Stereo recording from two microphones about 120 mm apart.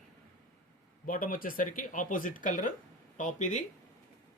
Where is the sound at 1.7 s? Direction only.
90° left.